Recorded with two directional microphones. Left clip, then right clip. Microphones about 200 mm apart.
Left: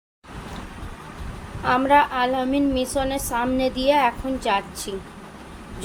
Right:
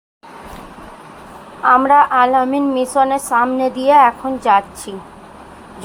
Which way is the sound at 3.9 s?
5° left (ahead or behind).